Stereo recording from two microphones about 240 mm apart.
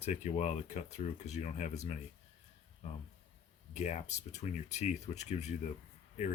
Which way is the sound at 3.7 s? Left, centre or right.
Left.